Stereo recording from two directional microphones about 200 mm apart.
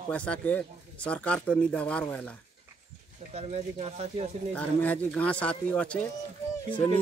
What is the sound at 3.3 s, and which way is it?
Speech, 35° right (ahead or behind).